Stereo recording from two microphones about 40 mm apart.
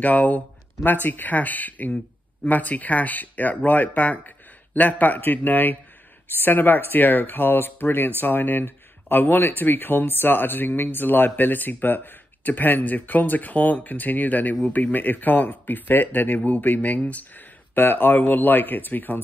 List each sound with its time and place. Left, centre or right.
0.0 s speech: left